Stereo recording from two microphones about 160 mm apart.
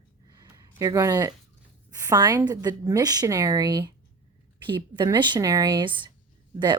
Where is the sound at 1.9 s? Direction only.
20° right (ahead or behind).